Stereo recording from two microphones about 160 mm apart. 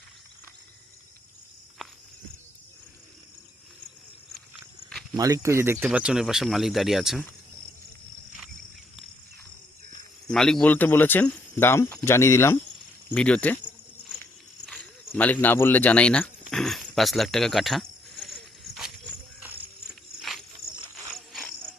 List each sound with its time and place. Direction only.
5.1 s speech: 20° right (ahead or behind); by 7.3 s centre (ahead or behind)
10.2 s speech: 5° left (ahead or behind)
15.1 s speech: 10° left (ahead or behind)
18.3 s a sound: centre (ahead or behind)